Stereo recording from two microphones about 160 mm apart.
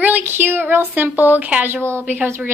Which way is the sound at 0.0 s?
10° right (ahead or behind).